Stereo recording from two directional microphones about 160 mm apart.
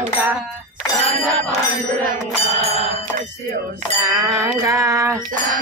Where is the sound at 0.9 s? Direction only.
Centre (ahead or behind).